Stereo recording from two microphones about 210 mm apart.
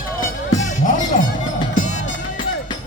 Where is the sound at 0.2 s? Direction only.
35° left (ahead or behind).